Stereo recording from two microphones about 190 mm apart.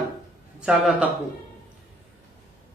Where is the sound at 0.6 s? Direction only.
5° right (ahead or behind).